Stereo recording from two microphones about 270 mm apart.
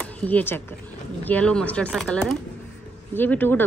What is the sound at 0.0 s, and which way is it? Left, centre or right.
A woman's voice, centre.